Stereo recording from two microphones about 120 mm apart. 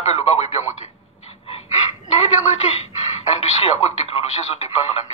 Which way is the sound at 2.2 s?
75° left (ahead or behind).